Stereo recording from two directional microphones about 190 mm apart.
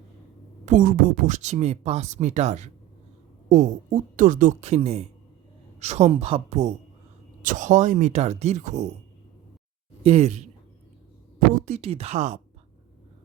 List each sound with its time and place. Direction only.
0.6 s speech: 40° right (ahead or behind)
10.0 s speech: 35° right (ahead or behind)